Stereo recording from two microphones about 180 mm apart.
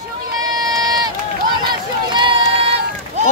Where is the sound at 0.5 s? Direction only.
20° right (ahead or behind).